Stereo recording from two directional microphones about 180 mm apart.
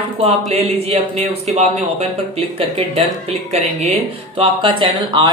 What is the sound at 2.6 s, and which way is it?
A man's voice, 30° right (ahead or behind).